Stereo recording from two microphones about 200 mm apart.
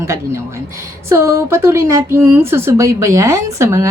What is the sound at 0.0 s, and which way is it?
A woman's voice, 15° right (ahead or behind).